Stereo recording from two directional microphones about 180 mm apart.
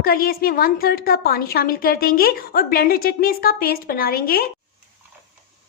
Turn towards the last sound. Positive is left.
turn(degrees=55)  # may be behind; listen again after turning